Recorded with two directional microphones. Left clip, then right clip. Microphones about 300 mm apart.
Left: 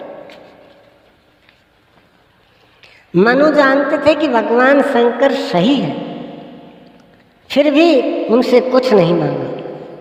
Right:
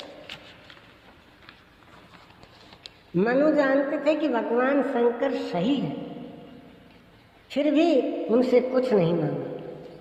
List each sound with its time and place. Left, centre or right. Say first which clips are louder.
3.2 s a woman's voice: left 11 dB; left
7.4 s a man's voice: left 11 dB; left